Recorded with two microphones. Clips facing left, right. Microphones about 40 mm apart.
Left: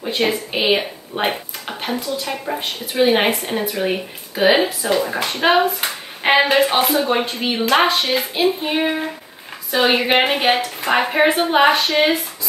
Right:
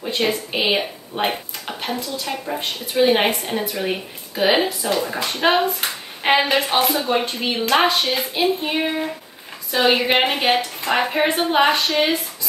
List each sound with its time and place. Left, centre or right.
0.0 s speech: centre
10.5 s a woman's voice: left
11.0 s speech: centre